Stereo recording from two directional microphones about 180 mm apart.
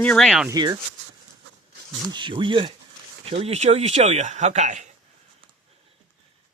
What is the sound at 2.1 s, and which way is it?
Speech, 25° right (ahead or behind).